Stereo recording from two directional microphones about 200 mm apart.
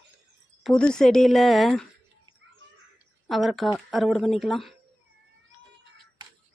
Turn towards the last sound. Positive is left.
turn(degrees=0)  # may be behind; listen again after turning